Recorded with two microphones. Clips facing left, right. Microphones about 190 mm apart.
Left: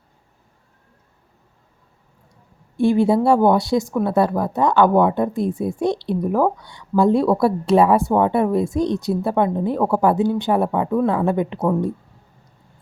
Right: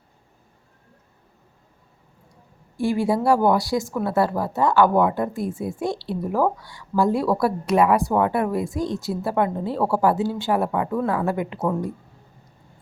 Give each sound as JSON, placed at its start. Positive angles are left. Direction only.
{"t": 2.7, "sound": "a woman's voice", "side_deg": 20}